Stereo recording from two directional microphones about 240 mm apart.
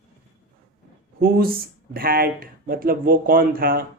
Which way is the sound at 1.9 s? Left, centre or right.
Right.